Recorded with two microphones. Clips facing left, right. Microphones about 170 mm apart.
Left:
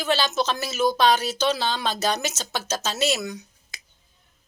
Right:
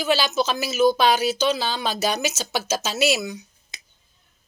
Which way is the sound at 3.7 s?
20° right (ahead or behind).